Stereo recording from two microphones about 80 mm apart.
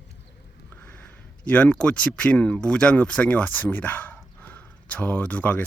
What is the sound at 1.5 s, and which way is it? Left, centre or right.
Speech, centre.